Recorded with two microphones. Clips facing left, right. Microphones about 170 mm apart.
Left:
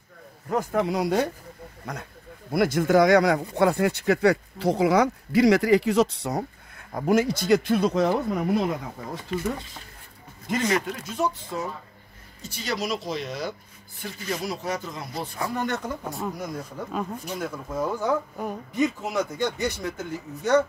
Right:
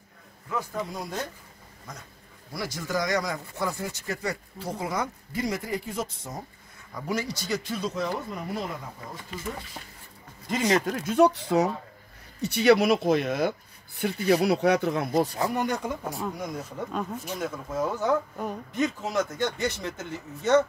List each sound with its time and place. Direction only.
0.5 s a man's voice: 45° left (ahead or behind)
0.7 s speech: 75° left (ahead or behind)
1.9 s speech: 65° left (ahead or behind)
6.9 s speech: 50° left (ahead or behind)
10.9 s speech: 60° right (ahead or behind)
15.3 s speech: 15° right (ahead or behind); by 20.6 s 5° left (ahead or behind)